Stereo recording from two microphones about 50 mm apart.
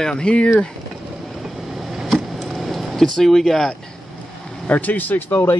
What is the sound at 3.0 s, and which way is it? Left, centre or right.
Speech, centre.